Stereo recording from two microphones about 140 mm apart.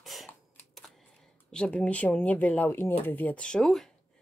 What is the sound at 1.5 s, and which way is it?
Speech, 5° left (ahead or behind).